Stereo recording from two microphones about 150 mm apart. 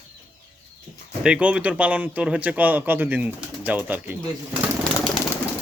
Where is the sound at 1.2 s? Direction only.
10° right (ahead or behind).